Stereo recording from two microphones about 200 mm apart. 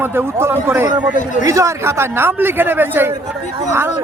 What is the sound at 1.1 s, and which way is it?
Speech, 40° left (ahead or behind).